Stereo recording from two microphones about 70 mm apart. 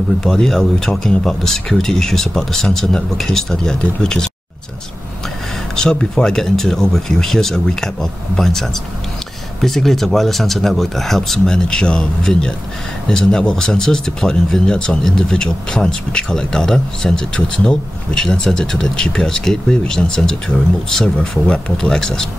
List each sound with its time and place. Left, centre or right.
0.2 s speech: centre
5.8 s speech: centre